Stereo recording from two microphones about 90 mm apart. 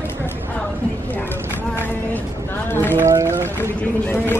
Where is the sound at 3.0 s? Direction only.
30° right (ahead or behind).